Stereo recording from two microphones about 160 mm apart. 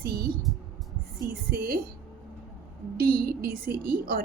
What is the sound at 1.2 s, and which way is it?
Speech, 65° right (ahead or behind).